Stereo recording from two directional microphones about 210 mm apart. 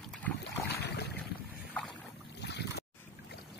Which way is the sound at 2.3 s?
55° left (ahead or behind).